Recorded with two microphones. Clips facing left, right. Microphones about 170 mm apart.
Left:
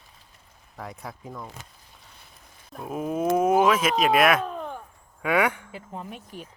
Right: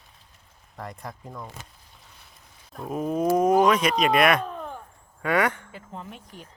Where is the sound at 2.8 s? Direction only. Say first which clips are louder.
Right 1 dB; 5° left (ahead or behind).